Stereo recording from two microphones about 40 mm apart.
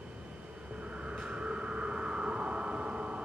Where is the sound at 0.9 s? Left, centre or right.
Right.